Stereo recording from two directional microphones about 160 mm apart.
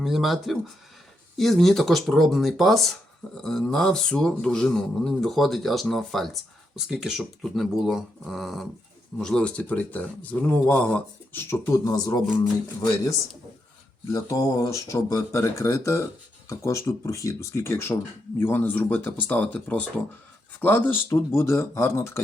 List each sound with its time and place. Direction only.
0.0 s a man's voice: centre (ahead or behind); by 12.2 s 25° left (ahead or behind)
14.1 s speech: 20° left (ahead or behind)